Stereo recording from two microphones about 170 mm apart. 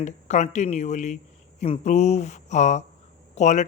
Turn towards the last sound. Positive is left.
turn(degrees=45)  # may be behind; listen again after turning